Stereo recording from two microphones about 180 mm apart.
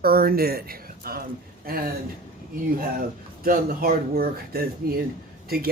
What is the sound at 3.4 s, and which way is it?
Speech, 55° right (ahead or behind).